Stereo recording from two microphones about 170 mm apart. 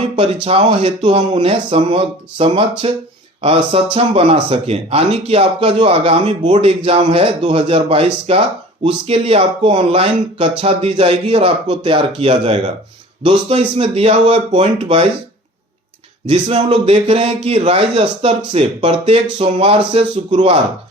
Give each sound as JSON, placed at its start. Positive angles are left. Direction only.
{"t": 0.4, "sound": "speech", "side_deg": -35}
{"t": 16.3, "sound": "speech", "side_deg": -35}